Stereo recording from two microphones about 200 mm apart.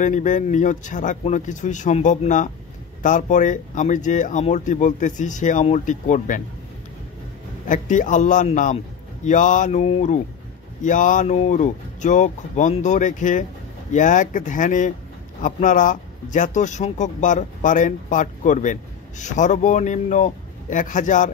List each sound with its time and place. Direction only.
0.0 s speech: 40° left (ahead or behind)
7.6 s speech: 40° left (ahead or behind)